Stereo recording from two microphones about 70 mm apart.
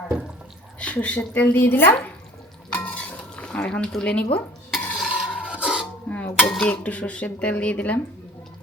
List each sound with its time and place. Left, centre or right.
0.8 s dishes: centre
4.9 s a sound: centre
5.3 s music: centre
6.1 s dishes: left